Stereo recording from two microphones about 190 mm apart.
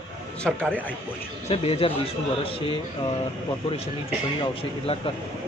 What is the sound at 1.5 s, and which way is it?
A man's voice, 30° left (ahead or behind).